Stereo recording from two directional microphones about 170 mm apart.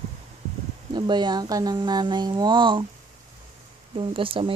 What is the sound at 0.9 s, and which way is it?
Speech, 25° right (ahead or behind).